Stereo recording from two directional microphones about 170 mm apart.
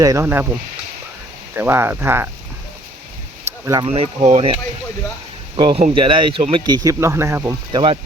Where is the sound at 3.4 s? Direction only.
15° right (ahead or behind).